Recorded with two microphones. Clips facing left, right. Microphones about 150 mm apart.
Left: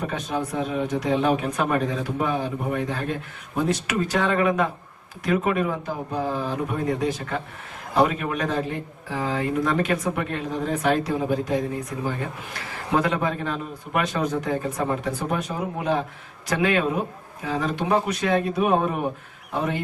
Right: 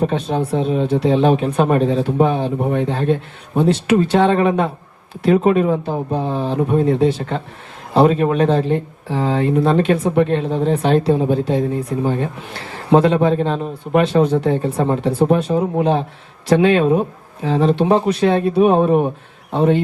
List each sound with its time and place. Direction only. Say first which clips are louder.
0.0 s speech: right 8 dB; 30° right (ahead or behind)